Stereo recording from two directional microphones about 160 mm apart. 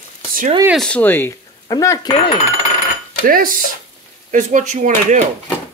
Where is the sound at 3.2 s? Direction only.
60° right (ahead or behind).